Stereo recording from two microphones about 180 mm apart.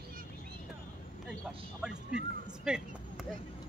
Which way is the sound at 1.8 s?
5° right (ahead or behind).